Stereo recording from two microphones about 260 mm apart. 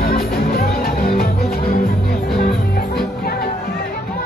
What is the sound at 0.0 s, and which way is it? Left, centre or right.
Music, left.